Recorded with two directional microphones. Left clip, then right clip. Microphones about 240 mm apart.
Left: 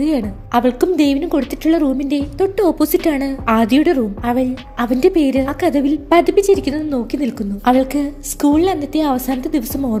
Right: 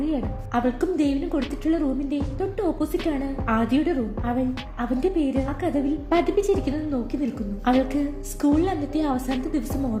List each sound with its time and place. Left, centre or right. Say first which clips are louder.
0.0 s a woman's voice: left 9 dB; left